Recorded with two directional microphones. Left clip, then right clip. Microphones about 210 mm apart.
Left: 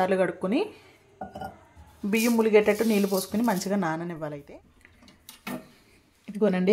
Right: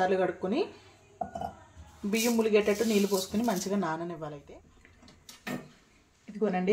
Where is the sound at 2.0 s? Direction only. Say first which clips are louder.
Left 4 dB; 35° left (ahead or behind).